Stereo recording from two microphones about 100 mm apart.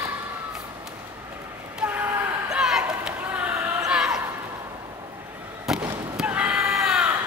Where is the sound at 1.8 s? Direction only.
15° right (ahead or behind).